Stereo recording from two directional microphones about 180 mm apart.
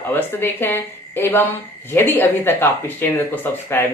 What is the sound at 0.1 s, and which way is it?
Speech, 10° left (ahead or behind).